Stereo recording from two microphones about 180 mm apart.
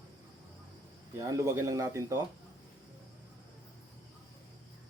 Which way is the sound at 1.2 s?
15° right (ahead or behind).